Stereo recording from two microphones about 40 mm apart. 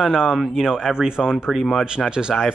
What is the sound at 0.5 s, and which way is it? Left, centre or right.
Speech, centre.